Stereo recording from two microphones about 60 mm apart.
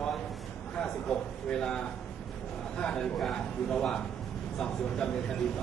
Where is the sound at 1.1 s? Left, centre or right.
Centre.